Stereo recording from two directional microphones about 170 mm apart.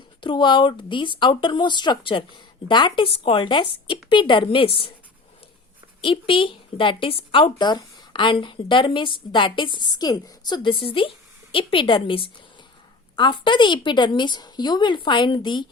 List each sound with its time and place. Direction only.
0.2 s speech: 30° left (ahead or behind)
6.0 s speech: 30° left (ahead or behind)